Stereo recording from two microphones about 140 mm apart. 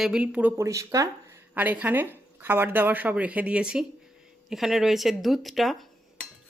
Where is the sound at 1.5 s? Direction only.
10° right (ahead or behind).